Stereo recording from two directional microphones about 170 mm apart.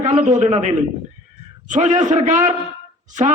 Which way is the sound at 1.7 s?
45° right (ahead or behind).